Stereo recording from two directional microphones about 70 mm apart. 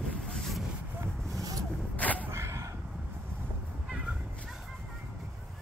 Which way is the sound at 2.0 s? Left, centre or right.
Left.